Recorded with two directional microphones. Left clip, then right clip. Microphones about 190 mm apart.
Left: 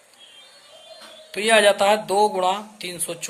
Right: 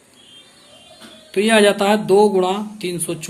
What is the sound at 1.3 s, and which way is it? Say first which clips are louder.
A woman's voice: right 2 dB; 15° left (ahead or behind).